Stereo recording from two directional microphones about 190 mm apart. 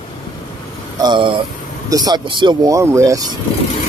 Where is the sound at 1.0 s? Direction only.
25° right (ahead or behind).